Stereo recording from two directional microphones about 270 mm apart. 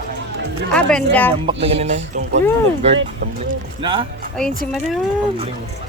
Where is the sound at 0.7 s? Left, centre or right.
Centre.